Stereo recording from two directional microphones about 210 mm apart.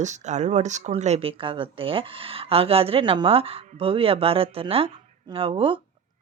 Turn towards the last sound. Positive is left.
turn(degrees=-25)  # may be behind; listen again after turning